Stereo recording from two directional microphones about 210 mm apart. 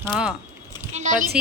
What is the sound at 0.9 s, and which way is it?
Speech, 35° right (ahead or behind).